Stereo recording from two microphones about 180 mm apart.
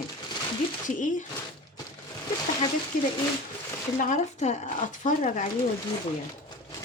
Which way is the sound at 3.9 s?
45° left (ahead or behind).